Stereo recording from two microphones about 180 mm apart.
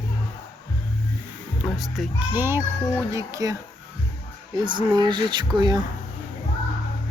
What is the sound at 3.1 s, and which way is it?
Speech, 20° right (ahead or behind).